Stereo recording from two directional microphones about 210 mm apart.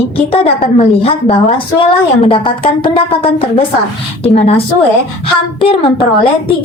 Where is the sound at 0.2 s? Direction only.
30° left (ahead or behind).